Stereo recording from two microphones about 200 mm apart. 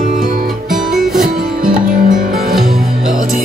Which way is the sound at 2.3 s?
Centre (ahead or behind).